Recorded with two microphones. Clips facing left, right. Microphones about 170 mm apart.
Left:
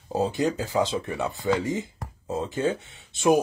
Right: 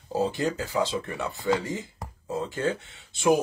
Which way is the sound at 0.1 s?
20° left (ahead or behind).